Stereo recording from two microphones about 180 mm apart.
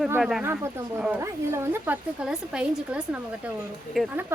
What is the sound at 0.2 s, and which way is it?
Speech, centre (ahead or behind).